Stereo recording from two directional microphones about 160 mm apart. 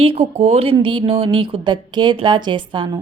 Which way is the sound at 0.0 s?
40° right (ahead or behind).